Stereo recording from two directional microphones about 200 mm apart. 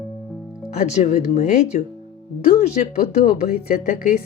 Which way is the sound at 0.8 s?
35° left (ahead or behind).